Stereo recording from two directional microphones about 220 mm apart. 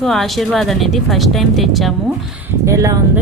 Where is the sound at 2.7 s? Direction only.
15° right (ahead or behind).